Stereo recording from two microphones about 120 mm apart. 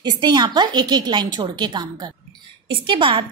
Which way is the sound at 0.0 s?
40° right (ahead or behind).